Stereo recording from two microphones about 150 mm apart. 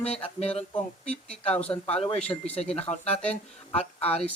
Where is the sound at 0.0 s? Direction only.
45° left (ahead or behind).